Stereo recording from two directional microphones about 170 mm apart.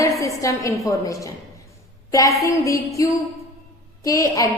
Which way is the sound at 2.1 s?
20° left (ahead or behind).